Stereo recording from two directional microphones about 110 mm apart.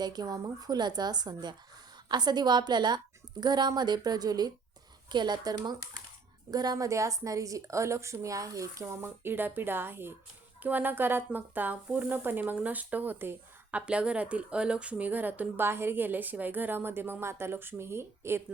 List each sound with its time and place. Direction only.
0.0 s a woman's voice: 40° right (ahead or behind)